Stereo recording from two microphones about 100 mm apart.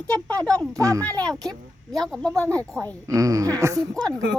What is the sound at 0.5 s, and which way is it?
Speech, 35° right (ahead or behind).